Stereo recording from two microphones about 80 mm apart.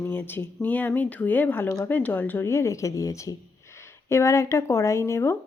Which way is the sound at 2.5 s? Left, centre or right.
Left.